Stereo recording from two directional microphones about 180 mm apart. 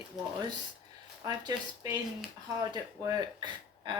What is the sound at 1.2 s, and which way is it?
A woman's voice, 20° right (ahead or behind).